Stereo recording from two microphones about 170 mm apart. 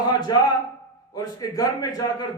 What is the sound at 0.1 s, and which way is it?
A man's voice, 25° left (ahead or behind).